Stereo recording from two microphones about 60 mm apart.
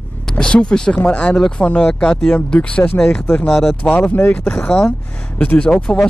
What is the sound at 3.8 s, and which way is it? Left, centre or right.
Speech, left.